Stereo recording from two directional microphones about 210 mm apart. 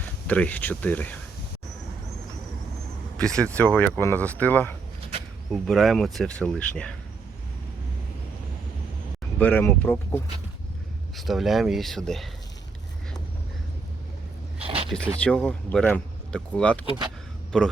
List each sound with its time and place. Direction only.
0.3 s speech: 5° left (ahead or behind)
3.2 s speech: 5° left (ahead or behind)
9.4 s speech: 10° left (ahead or behind)
11.2 s speech: centre (ahead or behind)
14.6 s a sound: 25° right (ahead or behind)
14.8 s speech: 5° left (ahead or behind)